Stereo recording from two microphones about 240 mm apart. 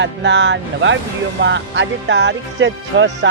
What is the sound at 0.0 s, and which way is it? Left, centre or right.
Speech, right.